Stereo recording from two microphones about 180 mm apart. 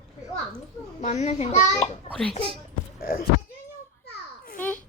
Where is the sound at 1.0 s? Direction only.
40° left (ahead or behind).